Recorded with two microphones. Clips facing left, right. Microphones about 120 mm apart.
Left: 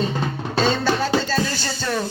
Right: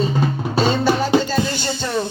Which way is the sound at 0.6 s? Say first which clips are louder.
Right 2 dB; 15° right (ahead or behind).